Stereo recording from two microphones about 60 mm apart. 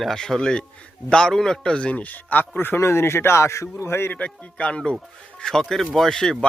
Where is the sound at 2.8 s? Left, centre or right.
Left.